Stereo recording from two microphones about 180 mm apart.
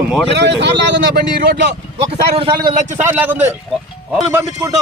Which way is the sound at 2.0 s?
30° right (ahead or behind).